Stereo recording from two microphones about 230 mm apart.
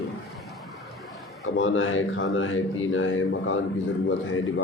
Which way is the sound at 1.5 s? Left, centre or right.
Left.